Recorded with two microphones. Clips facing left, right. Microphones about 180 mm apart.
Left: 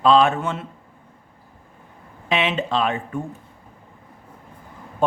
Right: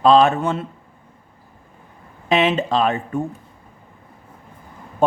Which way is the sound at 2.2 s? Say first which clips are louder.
Right 5 dB; 40° right (ahead or behind).